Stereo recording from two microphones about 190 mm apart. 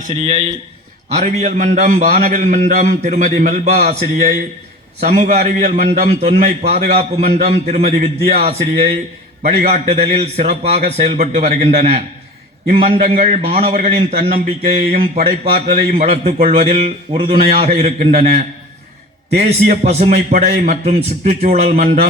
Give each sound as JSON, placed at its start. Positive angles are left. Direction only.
{"t": 0.0, "sound": "a man's voice", "side_deg": -35}